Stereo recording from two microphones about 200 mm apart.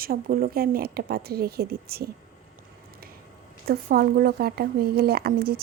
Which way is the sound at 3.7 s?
50° right (ahead or behind).